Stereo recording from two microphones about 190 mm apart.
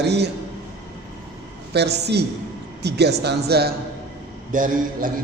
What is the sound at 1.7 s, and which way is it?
A man's voice, 60° right (ahead or behind).